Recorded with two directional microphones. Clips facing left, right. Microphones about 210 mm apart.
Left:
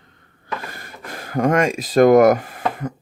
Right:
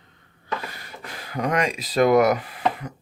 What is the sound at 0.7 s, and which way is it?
Speech, 50° left (ahead or behind).